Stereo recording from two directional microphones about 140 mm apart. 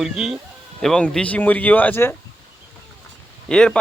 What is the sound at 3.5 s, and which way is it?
Speech, 5° left (ahead or behind).